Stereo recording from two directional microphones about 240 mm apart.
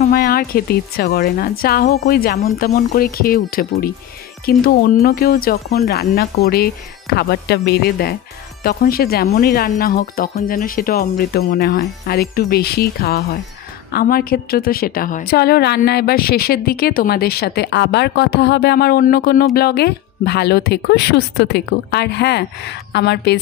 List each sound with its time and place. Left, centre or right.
0.0 s a woman's voice: left